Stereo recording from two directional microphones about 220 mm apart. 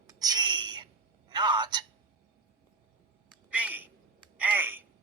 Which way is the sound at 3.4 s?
5° right (ahead or behind).